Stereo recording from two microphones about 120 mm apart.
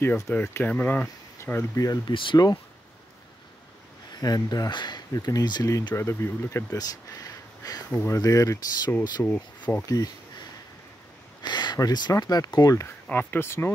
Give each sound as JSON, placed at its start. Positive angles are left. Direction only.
{"t": 0.0, "sound": "speech", "side_deg": 15}
{"t": 4.1, "sound": "speech", "side_deg": 35}
{"t": 6.7, "sound": "speech", "side_deg": 30}
{"t": 9.2, "sound": "speech", "side_deg": 15}
{"t": 11.4, "sound": "speech", "side_deg": 35}
{"t": 13.1, "sound": "speech", "side_deg": 15}